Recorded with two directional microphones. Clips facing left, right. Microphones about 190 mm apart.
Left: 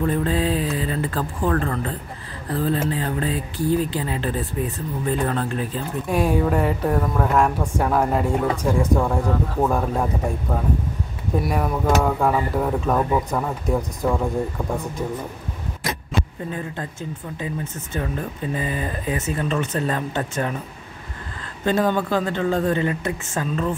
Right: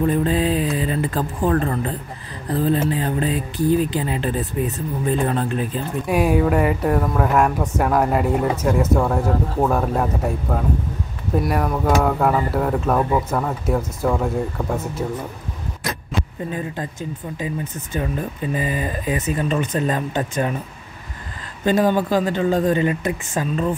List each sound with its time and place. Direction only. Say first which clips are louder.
0.0 s speech: right 3 dB; 20° right (ahead or behind)
6.0 s speech: right 2 dB; 10° right (ahead or behind)
17.9 s speech: right 2 dB; 15° right (ahead or behind)
21.6 s speech: right 3 dB; 15° right (ahead or behind)